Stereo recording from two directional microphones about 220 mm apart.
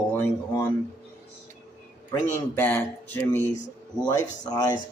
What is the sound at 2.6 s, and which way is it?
Speech, 10° left (ahead or behind).